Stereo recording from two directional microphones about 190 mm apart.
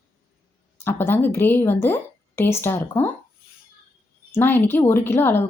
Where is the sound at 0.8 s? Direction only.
10° left (ahead or behind).